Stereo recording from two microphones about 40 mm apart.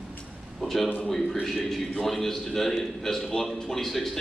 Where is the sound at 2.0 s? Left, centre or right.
Centre.